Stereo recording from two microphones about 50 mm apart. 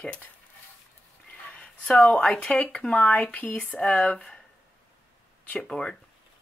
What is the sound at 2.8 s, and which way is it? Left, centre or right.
Speech, left.